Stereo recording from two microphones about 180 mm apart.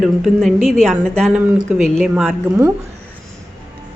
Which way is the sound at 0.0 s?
Centre (ahead or behind).